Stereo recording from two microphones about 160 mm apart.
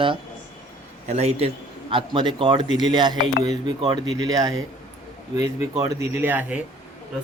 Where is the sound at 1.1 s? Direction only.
45° right (ahead or behind).